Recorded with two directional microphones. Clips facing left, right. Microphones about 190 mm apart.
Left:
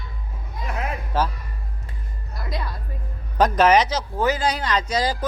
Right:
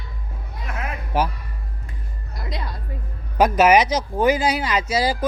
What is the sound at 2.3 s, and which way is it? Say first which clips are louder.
Music: left 1 dB; 20° right (ahead or behind).